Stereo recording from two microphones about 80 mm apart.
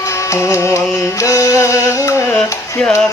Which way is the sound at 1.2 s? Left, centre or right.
Left.